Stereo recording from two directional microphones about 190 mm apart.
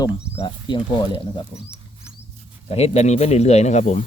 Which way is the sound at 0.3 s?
25° left (ahead or behind).